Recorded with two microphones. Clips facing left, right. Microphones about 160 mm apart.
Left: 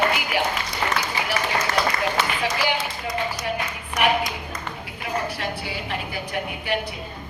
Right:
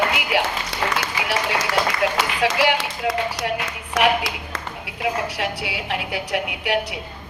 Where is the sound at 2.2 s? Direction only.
75° right (ahead or behind).